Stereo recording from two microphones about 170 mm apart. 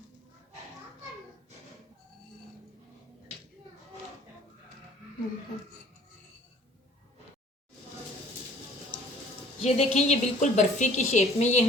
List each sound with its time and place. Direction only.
9.6 s a woman's voice: 40° left (ahead or behind)